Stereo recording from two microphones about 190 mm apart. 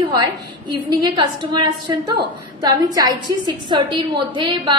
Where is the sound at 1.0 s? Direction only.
25° right (ahead or behind).